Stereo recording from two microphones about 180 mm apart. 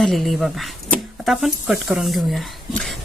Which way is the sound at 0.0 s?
Centre (ahead or behind).